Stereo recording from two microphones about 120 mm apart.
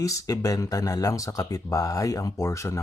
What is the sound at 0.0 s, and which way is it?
Speech, 30° left (ahead or behind).